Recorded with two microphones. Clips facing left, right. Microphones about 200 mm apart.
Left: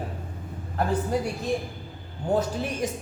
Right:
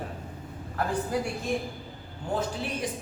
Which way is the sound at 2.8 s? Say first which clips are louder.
Left 4 dB; 45° left (ahead or behind).